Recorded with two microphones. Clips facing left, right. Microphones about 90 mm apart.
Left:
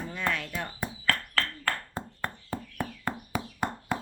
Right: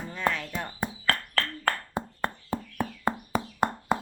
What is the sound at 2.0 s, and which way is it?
Frog, 15° right (ahead or behind).